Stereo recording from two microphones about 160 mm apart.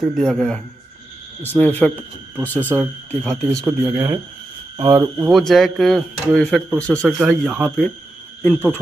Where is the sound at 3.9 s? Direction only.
15° right (ahead or behind).